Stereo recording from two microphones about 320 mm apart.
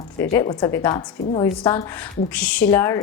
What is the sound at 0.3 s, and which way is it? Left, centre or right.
A woman's voice, centre.